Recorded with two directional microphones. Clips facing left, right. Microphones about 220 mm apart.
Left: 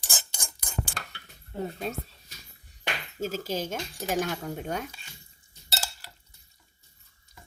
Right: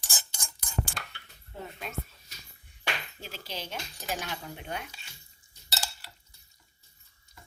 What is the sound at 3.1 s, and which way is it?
Stir, 45° left (ahead or behind).